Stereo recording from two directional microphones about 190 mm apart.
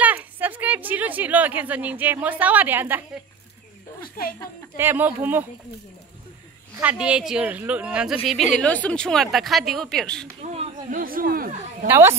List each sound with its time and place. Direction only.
0.0 s a woman's voice: 10° right (ahead or behind)
4.7 s speech: 10° right (ahead or behind)
6.8 s a woman's voice: 5° right (ahead or behind)
8.6 s a woman's voice: 5° left (ahead or behind)
10.4 s a sound: 35° right (ahead or behind)
10.9 s speech: 50° right (ahead or behind)
11.9 s speech: 15° right (ahead or behind)